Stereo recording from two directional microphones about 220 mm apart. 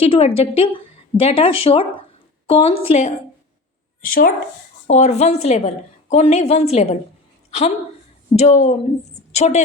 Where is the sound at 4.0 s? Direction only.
40° left (ahead or behind).